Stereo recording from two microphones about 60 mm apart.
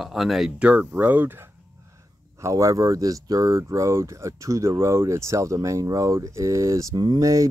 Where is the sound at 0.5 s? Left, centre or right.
Right.